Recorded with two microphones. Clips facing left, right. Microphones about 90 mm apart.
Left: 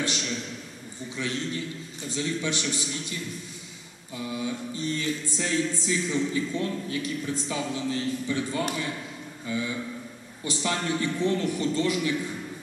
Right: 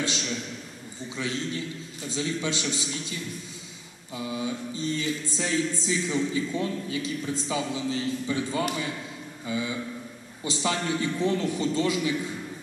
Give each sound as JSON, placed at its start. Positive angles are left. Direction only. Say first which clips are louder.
{"t": 1.1, "sound": "mantra", "louder": "even", "side_deg": -20}
{"t": 4.2, "sound": "mantra", "louder": "even", "side_deg": -20}
{"t": 9.5, "sound": "speech", "louder": "even", "side_deg": -15}
{"t": 10.4, "sound": "mantra", "louder": "right 1 dB", "side_deg": -20}